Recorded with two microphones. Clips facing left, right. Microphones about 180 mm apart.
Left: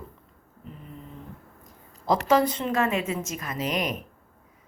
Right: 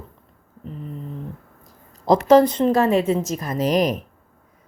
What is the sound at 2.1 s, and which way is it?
A woman's voice, 40° right (ahead or behind).